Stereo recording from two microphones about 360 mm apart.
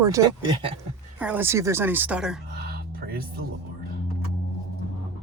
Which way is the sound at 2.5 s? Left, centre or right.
Right.